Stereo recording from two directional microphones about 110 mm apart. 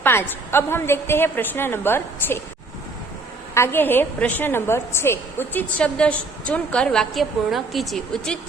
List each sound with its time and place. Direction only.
0.0 s a woman's voice: 20° left (ahead or behind)
3.5 s a woman's voice: 20° left (ahead or behind); by 8.4 s 5° left (ahead or behind)